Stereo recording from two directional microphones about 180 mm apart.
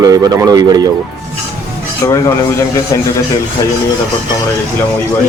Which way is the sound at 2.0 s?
20° left (ahead or behind).